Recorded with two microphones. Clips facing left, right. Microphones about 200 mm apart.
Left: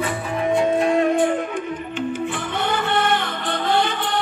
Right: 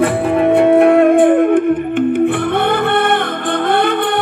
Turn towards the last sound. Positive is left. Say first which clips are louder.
# right 7 dB
turn(degrees=-55)  # may be behind; listen again after turning